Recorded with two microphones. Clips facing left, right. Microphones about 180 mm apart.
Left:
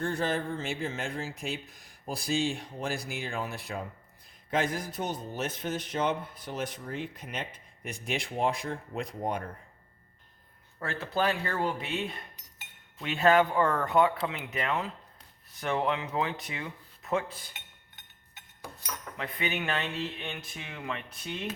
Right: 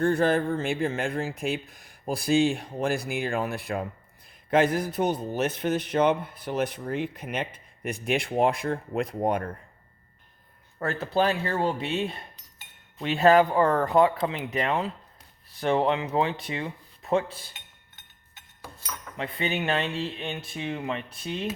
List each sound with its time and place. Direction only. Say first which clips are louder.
0.0 s a man's voice: right 8 dB; 60° right (ahead or behind)
10.8 s speech: right 5 dB; 45° right (ahead or behind)
18.6 s cutlery: right 1 dB; 15° left (ahead or behind)
19.1 s speech: right 4 dB; 25° right (ahead or behind)